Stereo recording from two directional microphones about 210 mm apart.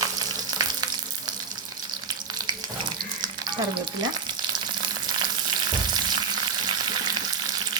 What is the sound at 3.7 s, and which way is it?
Frying, 20° right (ahead or behind).